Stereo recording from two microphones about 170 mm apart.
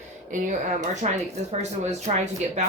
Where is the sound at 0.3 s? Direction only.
50° right (ahead or behind).